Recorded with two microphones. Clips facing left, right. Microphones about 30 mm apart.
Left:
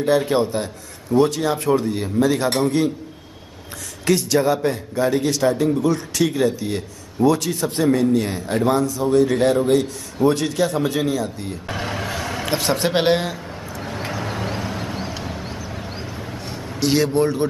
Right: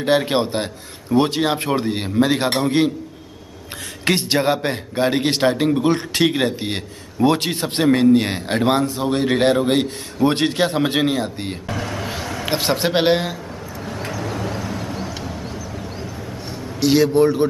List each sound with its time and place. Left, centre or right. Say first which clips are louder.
0.0 s a man's voice: even; right
4.0 s a man's voice: even; right
11.7 s vehicle: left 1 dB; left
12.4 s speech: right 1 dB; right
13.8 s vehicle: even; centre
14.1 s vehicle: right 1 dB; left
16.8 s a man's voice: right 3 dB; centre